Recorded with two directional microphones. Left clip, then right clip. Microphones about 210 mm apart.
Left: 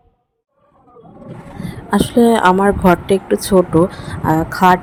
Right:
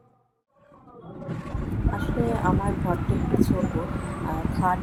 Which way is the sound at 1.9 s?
50° left (ahead or behind).